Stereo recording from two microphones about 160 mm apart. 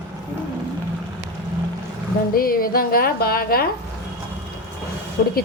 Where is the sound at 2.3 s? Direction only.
65° left (ahead or behind).